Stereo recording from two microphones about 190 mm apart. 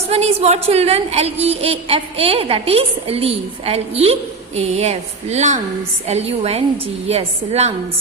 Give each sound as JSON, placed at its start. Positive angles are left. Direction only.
{"t": 0.1, "sound": "a woman's voice", "side_deg": -35}